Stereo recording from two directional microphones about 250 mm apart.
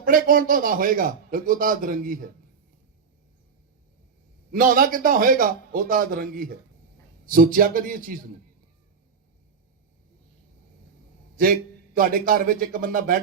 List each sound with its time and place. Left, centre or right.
0.0 s a man's voice: right
4.5 s a man's voice: right
11.9 s a man's voice: right